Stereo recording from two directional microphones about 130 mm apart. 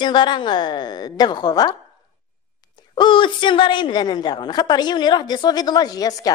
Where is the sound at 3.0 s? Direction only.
40° left (ahead or behind).